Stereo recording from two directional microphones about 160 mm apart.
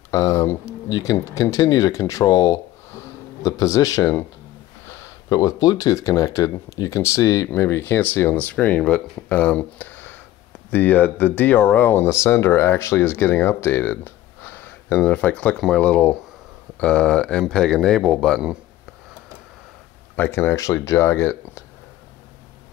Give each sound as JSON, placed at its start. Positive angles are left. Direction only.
{"t": 0.1, "sound": "speech", "side_deg": 20}
{"t": 20.2, "sound": "speech", "side_deg": 15}